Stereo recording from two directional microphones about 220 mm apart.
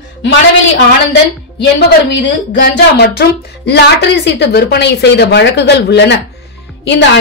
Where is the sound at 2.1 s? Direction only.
50° left (ahead or behind).